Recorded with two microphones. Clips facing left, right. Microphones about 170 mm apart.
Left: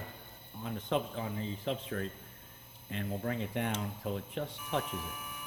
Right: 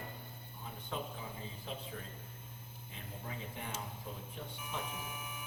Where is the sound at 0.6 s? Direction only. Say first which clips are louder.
Left 9 dB; 75° left (ahead or behind).